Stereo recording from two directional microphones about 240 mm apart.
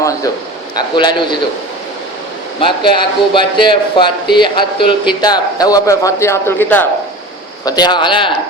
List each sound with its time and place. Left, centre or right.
0.8 s speech: centre
2.6 s speech: centre